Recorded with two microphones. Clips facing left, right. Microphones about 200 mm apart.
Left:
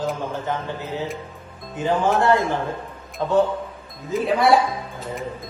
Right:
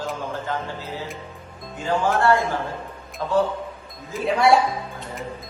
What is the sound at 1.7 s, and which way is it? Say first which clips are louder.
A man's voice: left 2 dB; 20° left (ahead or behind).